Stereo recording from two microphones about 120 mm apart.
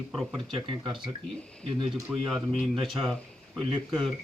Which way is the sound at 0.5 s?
45° right (ahead or behind).